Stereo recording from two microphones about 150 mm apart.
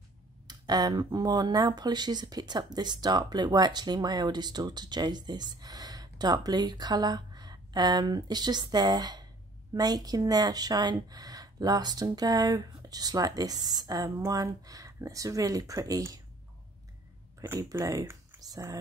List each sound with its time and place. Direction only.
0.5 s speech: 25° right (ahead or behind)
17.5 s speech: 20° right (ahead or behind)